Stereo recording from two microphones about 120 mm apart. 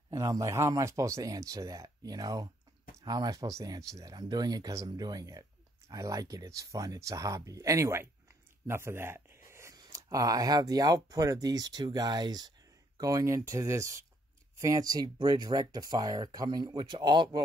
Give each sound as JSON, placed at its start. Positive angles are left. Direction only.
{"t": 0.1, "sound": "speech", "side_deg": -25}